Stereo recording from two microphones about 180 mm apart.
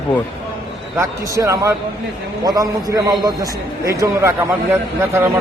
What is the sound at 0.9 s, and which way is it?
A man's voice, 15° right (ahead or behind).